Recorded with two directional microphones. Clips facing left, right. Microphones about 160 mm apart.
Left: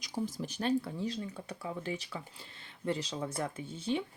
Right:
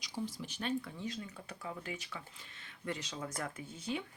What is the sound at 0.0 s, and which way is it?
Speech, 45° left (ahead or behind).